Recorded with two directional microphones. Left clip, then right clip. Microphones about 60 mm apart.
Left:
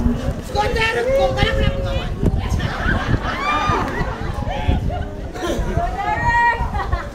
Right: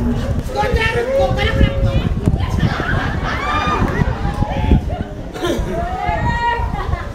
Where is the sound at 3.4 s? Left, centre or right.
Left.